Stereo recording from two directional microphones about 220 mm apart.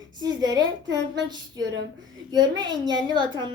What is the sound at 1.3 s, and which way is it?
A woman's voice, 20° right (ahead or behind).